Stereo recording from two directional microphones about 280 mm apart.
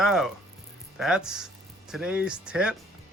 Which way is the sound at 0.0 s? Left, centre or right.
Centre.